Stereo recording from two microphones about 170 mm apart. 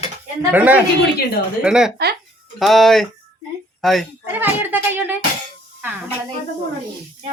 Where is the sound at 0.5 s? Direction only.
10° right (ahead or behind).